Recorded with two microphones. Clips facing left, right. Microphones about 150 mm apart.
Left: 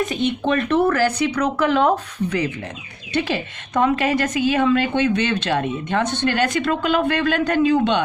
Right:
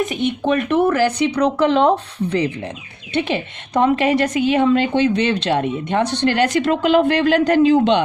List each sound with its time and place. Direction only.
0.0 s speech: 15° right (ahead or behind)
6.5 s speech: 45° right (ahead or behind)